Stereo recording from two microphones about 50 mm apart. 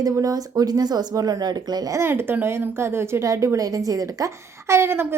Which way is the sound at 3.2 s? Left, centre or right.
Right.